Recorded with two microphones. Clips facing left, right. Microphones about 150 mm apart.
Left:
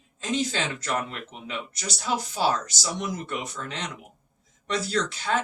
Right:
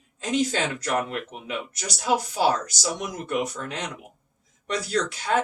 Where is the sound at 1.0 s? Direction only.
10° right (ahead or behind).